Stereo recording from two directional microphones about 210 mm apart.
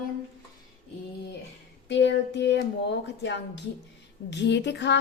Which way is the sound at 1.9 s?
55° left (ahead or behind).